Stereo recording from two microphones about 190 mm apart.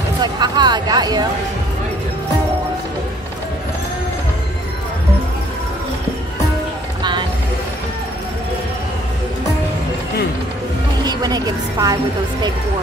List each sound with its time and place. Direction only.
0.2 s a woman's voice: 20° right (ahead or behind)
7.0 s a sound: 25° right (ahead or behind)
11.1 s a woman's voice: 20° right (ahead or behind)